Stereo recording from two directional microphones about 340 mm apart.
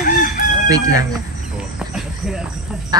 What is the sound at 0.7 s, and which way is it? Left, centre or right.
Speech, centre.